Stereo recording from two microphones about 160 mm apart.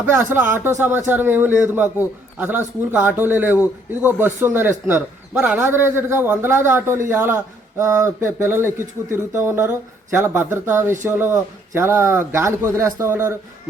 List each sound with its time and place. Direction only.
0.1 s a man's voice: 15° right (ahead or behind)
2.9 s a man's voice: 10° right (ahead or behind)